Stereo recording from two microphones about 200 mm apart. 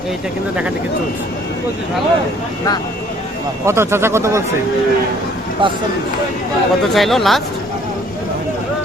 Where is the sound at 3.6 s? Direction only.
15° right (ahead or behind).